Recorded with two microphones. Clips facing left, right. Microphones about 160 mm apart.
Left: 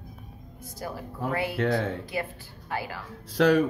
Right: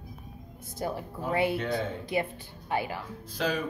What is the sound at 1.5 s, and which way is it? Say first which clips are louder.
Speech: left 4 dB; 70° left (ahead or behind).